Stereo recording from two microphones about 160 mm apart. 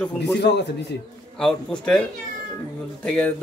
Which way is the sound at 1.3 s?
5° left (ahead or behind).